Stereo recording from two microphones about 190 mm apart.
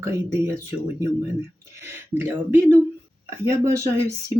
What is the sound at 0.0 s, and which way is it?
Speech, 15° right (ahead or behind).